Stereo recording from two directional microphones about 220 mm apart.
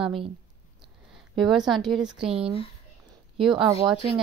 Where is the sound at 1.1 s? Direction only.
Centre (ahead or behind).